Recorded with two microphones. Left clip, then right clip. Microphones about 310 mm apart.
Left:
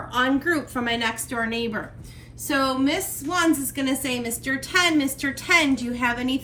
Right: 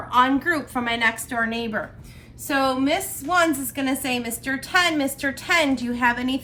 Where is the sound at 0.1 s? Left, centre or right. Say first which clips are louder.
Right 3 dB; centre.